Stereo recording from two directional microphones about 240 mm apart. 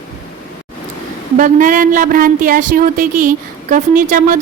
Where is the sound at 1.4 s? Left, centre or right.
Right.